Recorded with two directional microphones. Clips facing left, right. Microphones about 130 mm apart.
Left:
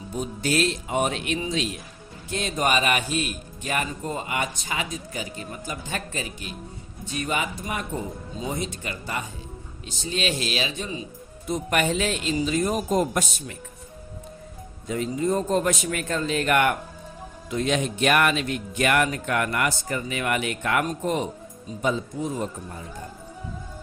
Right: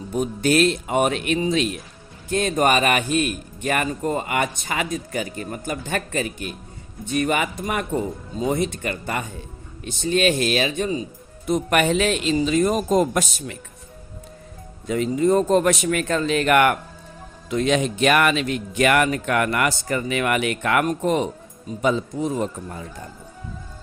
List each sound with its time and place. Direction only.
0.1 s speech: 60° right (ahead or behind)
11.4 s speech: 70° right (ahead or behind); by 13.6 s 90° right
14.8 s speech: 85° right
17.5 s speech: 90° right